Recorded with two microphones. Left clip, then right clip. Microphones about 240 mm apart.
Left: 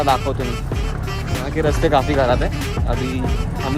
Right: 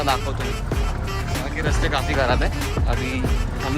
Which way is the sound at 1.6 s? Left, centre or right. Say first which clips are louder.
Left 8 dB; centre.